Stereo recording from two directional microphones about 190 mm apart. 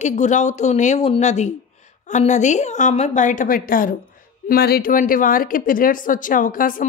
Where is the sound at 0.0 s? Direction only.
40° left (ahead or behind).